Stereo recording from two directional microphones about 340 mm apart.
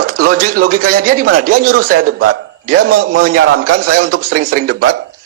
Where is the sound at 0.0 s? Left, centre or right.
Right.